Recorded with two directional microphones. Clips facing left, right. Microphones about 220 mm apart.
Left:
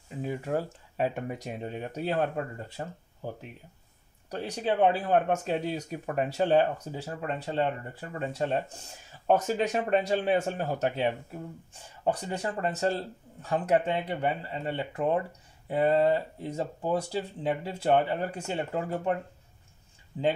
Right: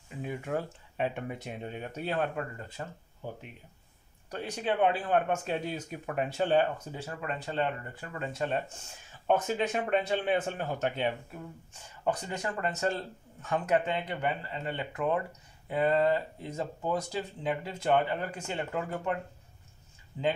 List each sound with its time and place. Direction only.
0.2 s speech: 35° left (ahead or behind)
2.8 s speech: 25° left (ahead or behind)
3.2 s speech: 40° left (ahead or behind)